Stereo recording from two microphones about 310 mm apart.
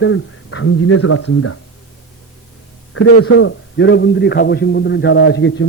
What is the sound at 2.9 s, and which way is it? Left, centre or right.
A man's voice, left.